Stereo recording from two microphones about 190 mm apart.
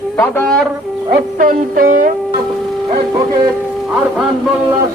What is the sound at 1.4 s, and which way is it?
Music, 45° right (ahead or behind).